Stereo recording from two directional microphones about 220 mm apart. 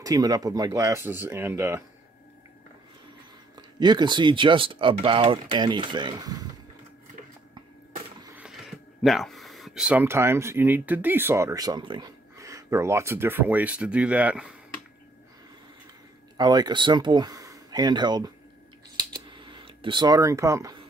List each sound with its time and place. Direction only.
0.0 s speech: 15° right (ahead or behind)
3.8 s speech: 20° right (ahead or behind)
8.4 s speech: centre (ahead or behind)
16.3 s speech: 20° right (ahead or behind)
18.9 s a sound: 20° right (ahead or behind)